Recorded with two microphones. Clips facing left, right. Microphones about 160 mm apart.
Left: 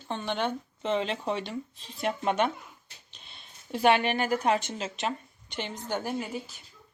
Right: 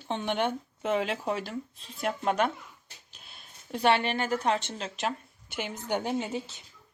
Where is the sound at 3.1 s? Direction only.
5° right (ahead or behind).